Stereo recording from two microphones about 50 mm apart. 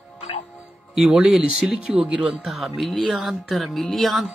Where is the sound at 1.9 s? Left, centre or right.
Right.